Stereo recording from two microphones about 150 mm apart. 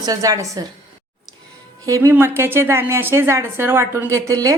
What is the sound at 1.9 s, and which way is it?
A woman's voice, 20° right (ahead or behind).